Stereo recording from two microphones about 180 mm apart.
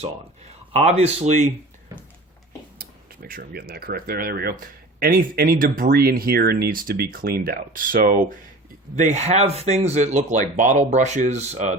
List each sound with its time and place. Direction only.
0.0 s speech: 35° right (ahead or behind)
2.7 s speech: 55° right (ahead or behind)
9.0 s speech: 40° right (ahead or behind)